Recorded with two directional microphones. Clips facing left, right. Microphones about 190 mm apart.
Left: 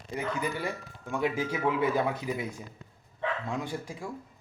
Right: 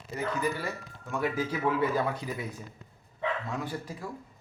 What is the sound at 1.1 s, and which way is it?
Speech, 15° left (ahead or behind).